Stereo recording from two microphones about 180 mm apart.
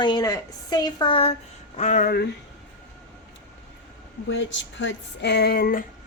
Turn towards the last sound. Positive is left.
turn(degrees=55)  # may be behind; listen again after turning